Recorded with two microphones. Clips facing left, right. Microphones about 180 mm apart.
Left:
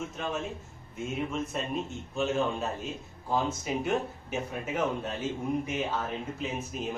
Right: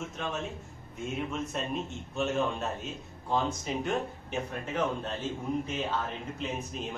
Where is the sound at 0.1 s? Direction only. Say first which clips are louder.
Left 1 dB; centre (ahead or behind).